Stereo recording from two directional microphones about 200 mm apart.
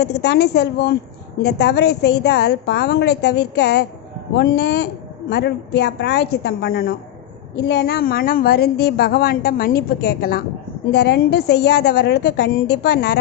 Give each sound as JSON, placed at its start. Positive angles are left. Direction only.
{"t": 0.0, "sound": "a woman's voice", "side_deg": 55}